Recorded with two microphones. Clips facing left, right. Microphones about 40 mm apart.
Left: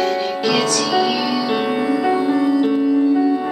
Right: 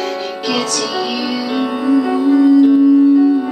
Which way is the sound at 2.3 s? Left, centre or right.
Centre.